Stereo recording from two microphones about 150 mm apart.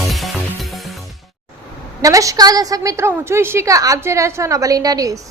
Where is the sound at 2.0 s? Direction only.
20° right (ahead or behind).